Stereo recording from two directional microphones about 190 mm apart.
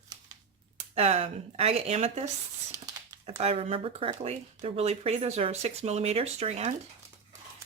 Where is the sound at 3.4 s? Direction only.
35° right (ahead or behind).